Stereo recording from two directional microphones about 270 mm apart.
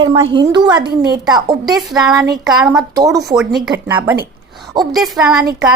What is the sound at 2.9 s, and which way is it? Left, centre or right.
A woman's voice, centre.